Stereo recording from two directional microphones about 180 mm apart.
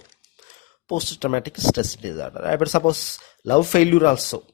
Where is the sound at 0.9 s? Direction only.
45° left (ahead or behind).